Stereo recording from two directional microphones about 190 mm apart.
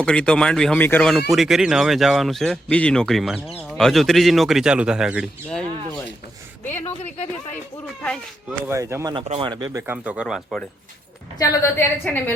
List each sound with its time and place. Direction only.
0.0 s speech: 5° left (ahead or behind)
6.8 s speech: 35° left (ahead or behind)
8.4 s speech: 15° right (ahead or behind)
9.1 s speech: 30° right (ahead or behind)
9.8 s speech: 10° right (ahead or behind)
11.3 s a woman's voice: 15° left (ahead or behind)